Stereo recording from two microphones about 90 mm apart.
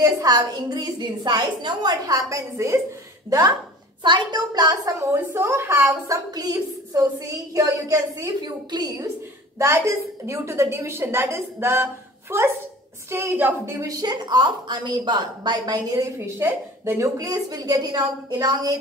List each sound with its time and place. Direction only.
0.0 s a woman's voice: 45° right (ahead or behind)
4.0 s a woman's voice: 55° right (ahead or behind)
5.1 s a woman's voice: 30° right (ahead or behind)
6.0 s a woman's voice: 40° right (ahead or behind)
9.6 s a woman's voice: 30° right (ahead or behind); by 16.0 s 50° right (ahead or behind)
16.0 s a woman's voice: 25° right (ahead or behind)
17.2 s a woman's voice: 45° right (ahead or behind)